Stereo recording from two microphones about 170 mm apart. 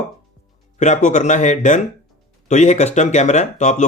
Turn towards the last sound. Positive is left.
turn(degrees=45)  # may be behind; listen again after turning